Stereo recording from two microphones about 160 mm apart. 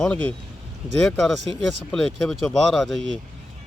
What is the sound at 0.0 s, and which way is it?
Speech, 10° left (ahead or behind).